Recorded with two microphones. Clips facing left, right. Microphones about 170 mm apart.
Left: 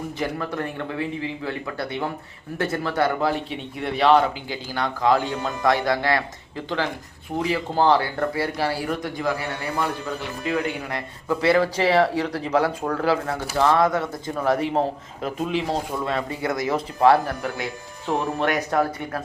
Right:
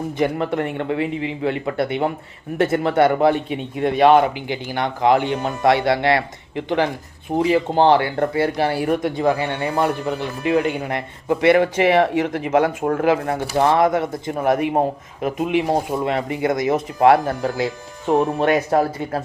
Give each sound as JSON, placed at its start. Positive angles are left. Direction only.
{"t": 0.2, "sound": "speech", "side_deg": -20}
{"t": 7.3, "sound": "speech", "side_deg": -25}